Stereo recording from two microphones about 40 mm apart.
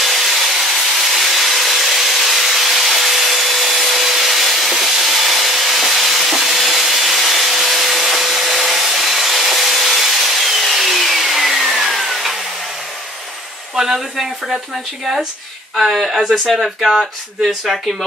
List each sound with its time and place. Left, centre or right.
0.0 s wood: centre
13.7 s a sound: centre
15.7 s speech: centre